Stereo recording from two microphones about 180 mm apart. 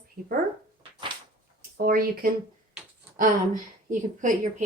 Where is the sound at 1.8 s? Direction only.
55° right (ahead or behind).